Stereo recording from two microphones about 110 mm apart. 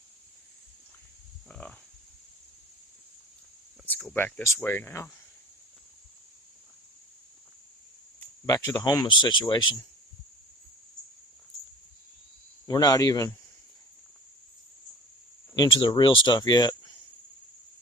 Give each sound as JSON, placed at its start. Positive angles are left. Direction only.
{"t": 1.5, "sound": "a sound", "side_deg": 10}
{"t": 4.1, "sound": "speech", "side_deg": 15}
{"t": 8.4, "sound": "speech", "side_deg": 35}
{"t": 12.6, "sound": "speech", "side_deg": 35}
{"t": 15.5, "sound": "speech", "side_deg": 35}
{"t": 15.8, "sound": "speech", "side_deg": 50}